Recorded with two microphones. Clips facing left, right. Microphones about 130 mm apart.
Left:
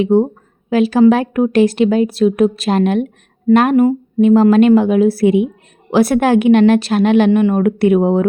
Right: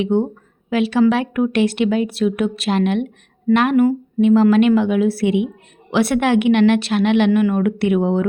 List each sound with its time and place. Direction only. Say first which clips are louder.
0.0 s a woman's voice: left 5 dB; 35° left (ahead or behind)